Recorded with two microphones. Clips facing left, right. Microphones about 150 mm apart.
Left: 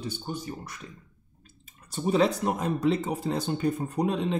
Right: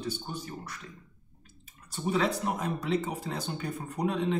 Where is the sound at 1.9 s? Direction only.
25° left (ahead or behind).